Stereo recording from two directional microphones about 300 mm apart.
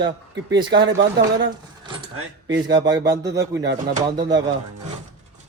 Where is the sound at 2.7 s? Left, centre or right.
Centre.